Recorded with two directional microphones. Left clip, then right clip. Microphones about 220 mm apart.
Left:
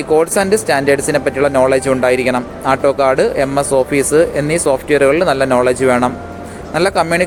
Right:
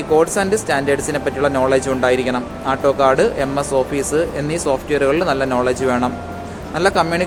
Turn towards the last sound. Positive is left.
turn(degrees=20)  # may be behind; listen again after turning